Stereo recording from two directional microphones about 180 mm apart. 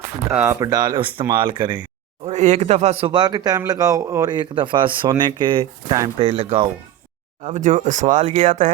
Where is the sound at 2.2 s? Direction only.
40° right (ahead or behind).